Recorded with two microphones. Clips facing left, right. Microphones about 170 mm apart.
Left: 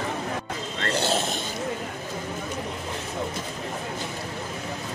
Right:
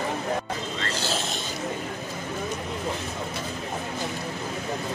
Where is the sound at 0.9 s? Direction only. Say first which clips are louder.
Left 6 dB; 60° left (ahead or behind).